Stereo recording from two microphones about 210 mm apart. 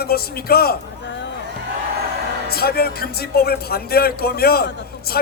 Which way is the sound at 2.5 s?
45° left (ahead or behind).